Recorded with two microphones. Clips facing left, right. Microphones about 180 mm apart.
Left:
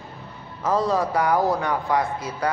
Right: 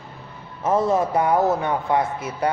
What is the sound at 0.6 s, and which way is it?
Mantra, 25° right (ahead or behind).